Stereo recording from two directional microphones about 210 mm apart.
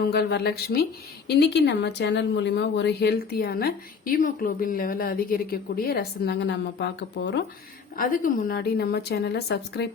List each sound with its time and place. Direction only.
0.1 s speech: 50° left (ahead or behind)
7.9 s speech: 40° left (ahead or behind)